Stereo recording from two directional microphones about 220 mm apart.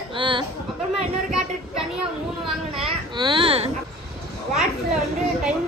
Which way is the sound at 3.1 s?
20° right (ahead or behind).